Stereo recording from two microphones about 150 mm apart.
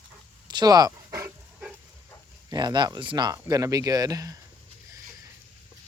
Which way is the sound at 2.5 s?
30° right (ahead or behind).